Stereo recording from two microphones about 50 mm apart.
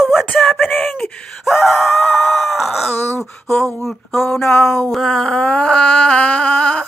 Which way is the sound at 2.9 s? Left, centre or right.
Left.